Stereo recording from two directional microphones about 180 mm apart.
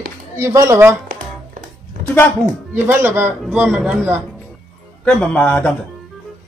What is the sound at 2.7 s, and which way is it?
A man's voice, 10° right (ahead or behind).